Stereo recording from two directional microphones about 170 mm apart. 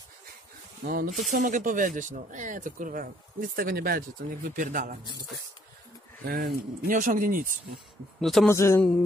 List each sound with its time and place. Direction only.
0.8 s speech: 55° right (ahead or behind)
6.2 s speech: 65° right (ahead or behind)
8.2 s a man's voice: centre (ahead or behind)
8.5 s a sound: 15° left (ahead or behind)